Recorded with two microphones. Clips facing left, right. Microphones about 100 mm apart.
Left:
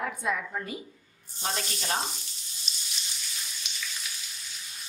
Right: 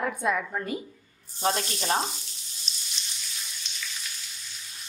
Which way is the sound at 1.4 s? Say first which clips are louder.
Right 6 dB; 40° right (ahead or behind).